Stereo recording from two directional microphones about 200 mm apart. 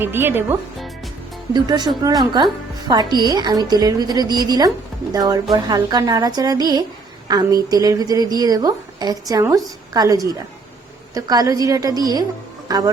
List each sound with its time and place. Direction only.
0.0 s a woman's voice: 10° right (ahead or behind)
1.5 s a woman's voice: 20° right (ahead or behind)